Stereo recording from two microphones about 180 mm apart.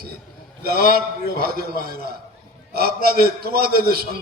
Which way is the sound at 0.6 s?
60° right (ahead or behind).